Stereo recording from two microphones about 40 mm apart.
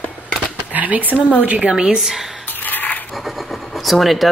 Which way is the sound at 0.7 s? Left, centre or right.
Right.